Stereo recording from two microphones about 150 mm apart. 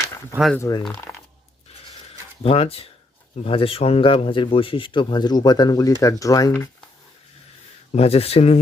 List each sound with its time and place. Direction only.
0.6 s speech: 20° left (ahead or behind)
2.4 s speech: 40° left (ahead or behind); by 6.5 s 20° left (ahead or behind)
7.9 s speech: 40° left (ahead or behind)